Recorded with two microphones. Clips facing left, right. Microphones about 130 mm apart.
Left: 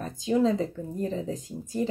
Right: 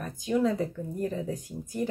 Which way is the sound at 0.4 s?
25° left (ahead or behind).